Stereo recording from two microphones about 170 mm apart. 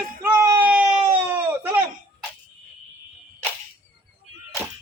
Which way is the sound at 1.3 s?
10° right (ahead or behind).